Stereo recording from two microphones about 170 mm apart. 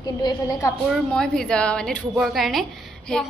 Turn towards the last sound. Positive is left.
turn(degrees=5)  # may be behind; listen again after turning